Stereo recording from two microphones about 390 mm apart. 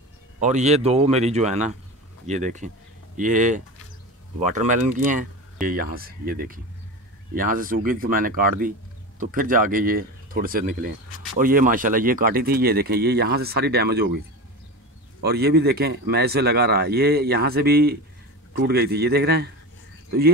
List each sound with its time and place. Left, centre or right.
0.4 s a man's voice: centre
15.2 s a man's voice: right